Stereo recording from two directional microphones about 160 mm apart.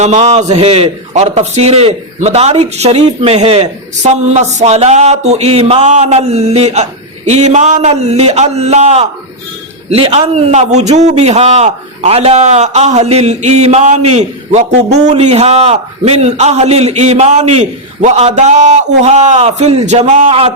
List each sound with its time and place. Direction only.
0.0 s a man's voice: 45° right (ahead or behind)